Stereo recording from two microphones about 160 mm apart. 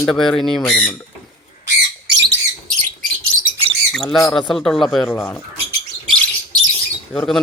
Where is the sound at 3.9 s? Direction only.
Centre (ahead or behind).